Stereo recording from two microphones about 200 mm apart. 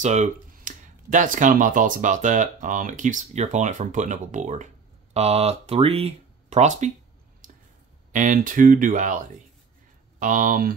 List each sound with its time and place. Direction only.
0.0 s speech: 35° right (ahead or behind)
7.4 s a sound: 40° right (ahead or behind)
8.1 s speech: 40° right (ahead or behind)